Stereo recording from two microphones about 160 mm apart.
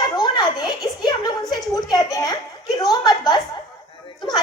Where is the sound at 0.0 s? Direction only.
25° left (ahead or behind).